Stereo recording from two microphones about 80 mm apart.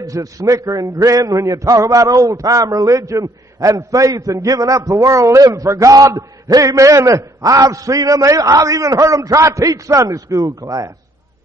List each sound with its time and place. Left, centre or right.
0.0 s a man's voice: right